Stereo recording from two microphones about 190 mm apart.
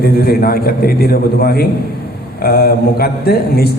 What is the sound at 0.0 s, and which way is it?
A man's voice, 55° left (ahead or behind).